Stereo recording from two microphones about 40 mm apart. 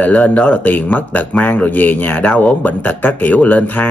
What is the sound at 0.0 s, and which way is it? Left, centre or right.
Speech, left.